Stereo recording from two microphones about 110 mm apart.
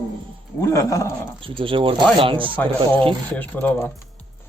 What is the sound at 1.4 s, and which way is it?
Speech, 55° right (ahead or behind).